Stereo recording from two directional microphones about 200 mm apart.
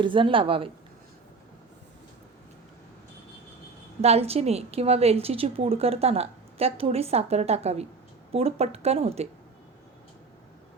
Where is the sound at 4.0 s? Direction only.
30° right (ahead or behind).